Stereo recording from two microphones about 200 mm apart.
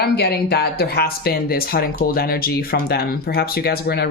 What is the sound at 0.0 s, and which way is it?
Speech, 55° left (ahead or behind).